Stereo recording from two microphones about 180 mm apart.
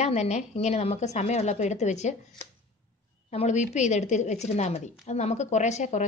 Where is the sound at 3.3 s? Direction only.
40° left (ahead or behind).